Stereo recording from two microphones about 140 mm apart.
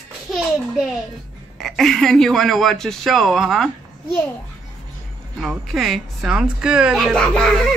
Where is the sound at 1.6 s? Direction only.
Centre (ahead or behind).